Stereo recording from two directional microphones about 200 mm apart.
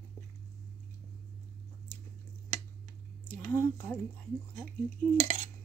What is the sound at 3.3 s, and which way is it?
Speech, 10° left (ahead or behind).